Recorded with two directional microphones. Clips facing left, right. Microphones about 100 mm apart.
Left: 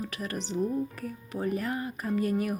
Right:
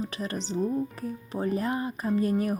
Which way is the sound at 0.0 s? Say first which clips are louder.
Right 2 dB; 25° right (ahead or behind).